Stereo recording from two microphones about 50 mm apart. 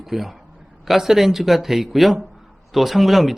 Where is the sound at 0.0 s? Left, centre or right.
Centre.